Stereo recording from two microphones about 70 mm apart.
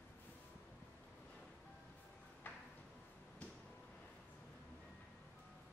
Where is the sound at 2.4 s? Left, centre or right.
Left.